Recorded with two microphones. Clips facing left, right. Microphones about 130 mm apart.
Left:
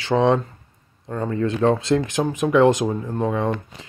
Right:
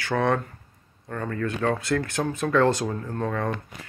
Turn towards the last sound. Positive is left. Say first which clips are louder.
# left 5 dB
turn(degrees=20)  # may be behind; listen again after turning